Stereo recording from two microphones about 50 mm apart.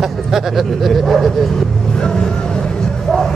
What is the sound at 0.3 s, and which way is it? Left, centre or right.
Speech, centre.